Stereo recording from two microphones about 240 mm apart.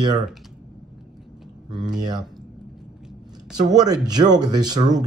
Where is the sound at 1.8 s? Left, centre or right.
Centre.